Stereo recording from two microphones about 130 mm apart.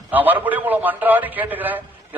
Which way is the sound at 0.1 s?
15° right (ahead or behind).